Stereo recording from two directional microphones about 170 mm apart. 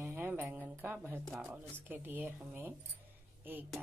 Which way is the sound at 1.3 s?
5° right (ahead or behind).